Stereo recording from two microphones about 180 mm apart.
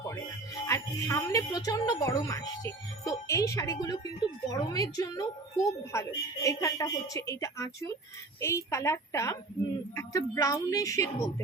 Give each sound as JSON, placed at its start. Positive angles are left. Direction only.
{"t": 0.7, "sound": "a woman's voice", "side_deg": 15}